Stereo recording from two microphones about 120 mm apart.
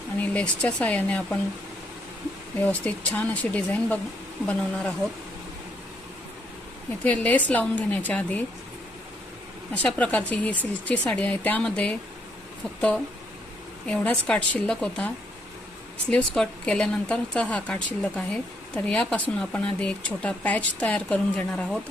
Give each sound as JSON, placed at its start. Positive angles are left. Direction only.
{"t": 0.2, "sound": "speech", "side_deg": 10}
{"t": 2.6, "sound": "speech", "side_deg": 10}
{"t": 7.0, "sound": "speech", "side_deg": 10}
{"t": 9.8, "sound": "speech", "side_deg": 10}
{"t": 13.8, "sound": "speech", "side_deg": 10}